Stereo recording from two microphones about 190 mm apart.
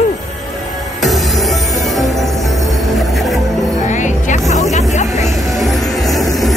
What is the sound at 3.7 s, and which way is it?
Music, 40° left (ahead or behind).